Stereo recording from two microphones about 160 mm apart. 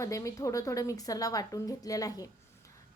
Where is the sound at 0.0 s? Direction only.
20° left (ahead or behind).